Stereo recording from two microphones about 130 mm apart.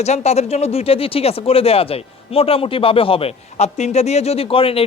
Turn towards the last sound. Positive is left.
turn(degrees=45)  # may be behind; listen again after turning